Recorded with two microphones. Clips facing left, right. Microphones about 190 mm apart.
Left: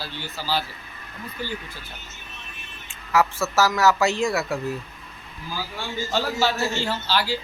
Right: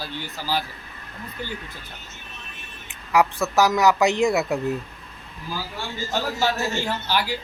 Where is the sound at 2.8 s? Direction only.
15° right (ahead or behind).